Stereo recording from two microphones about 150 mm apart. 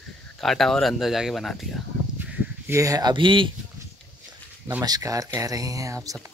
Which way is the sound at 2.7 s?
25° right (ahead or behind).